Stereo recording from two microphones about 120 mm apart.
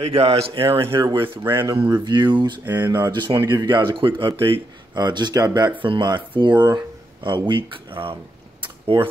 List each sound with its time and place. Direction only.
0.0 s speech: 55° right (ahead or behind)
1.4 s speech: 20° right (ahead or behind)
2.0 s speech: 40° right (ahead or behind)
2.6 s speech: 20° right (ahead or behind)
2.9 s speech: 35° right (ahead or behind)
5.8 s speech: 40° right (ahead or behind)